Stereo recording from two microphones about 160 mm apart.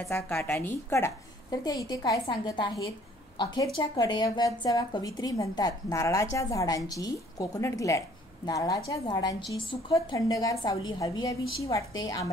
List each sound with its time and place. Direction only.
0.1 s a woman's voice: 15° left (ahead or behind)